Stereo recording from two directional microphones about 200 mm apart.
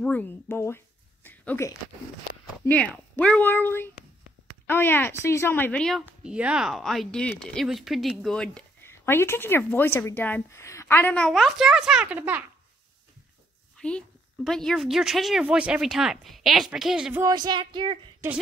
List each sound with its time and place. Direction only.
0.0 s a woman's voice: 10° left (ahead or behind); by 12.4 s 10° right (ahead or behind)
13.7 s a woman's voice: 5° left (ahead or behind)
17.2 s speech: 20° right (ahead or behind)